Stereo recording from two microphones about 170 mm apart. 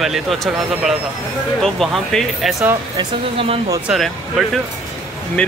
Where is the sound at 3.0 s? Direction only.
35° right (ahead or behind).